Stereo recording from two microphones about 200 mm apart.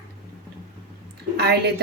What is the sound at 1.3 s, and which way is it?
Speech, 55° right (ahead or behind).